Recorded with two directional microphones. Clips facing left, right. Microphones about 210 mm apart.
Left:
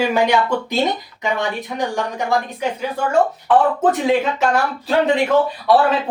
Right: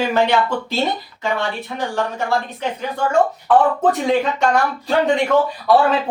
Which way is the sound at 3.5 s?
5° left (ahead or behind).